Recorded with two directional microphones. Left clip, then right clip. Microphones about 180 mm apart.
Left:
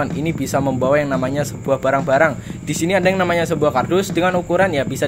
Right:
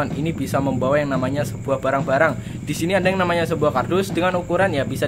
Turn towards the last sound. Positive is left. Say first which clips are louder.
# left 3 dB
turn(degrees=20)  # may be behind; listen again after turning